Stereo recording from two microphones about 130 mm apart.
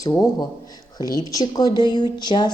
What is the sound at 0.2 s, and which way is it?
A woman's voice, 30° left (ahead or behind).